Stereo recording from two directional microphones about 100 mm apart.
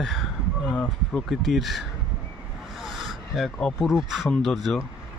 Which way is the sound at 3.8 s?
5° right (ahead or behind).